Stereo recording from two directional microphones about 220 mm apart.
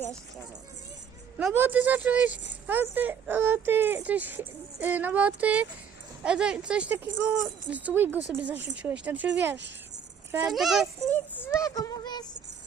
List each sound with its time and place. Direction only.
1.4 s speech: 5° right (ahead or behind)
10.3 s a child's voice: centre (ahead or behind)
11.3 s speech: 10° left (ahead or behind)